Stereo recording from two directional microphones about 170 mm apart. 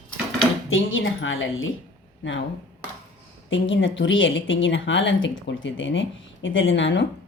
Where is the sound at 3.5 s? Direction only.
90° left.